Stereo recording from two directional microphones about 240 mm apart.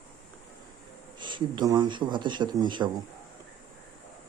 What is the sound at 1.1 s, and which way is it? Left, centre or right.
A man's voice, centre.